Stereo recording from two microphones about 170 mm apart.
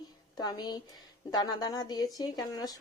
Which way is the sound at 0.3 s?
25° left (ahead or behind).